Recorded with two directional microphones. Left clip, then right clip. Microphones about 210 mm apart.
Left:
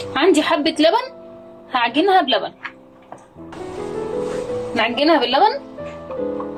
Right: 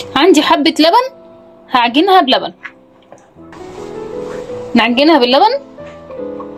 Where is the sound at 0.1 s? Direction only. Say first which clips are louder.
Right 7 dB; 60° right (ahead or behind).